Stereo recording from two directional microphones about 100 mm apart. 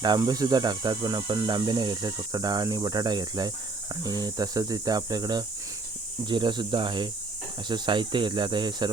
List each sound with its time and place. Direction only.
0.0 s speech: 40° right (ahead or behind)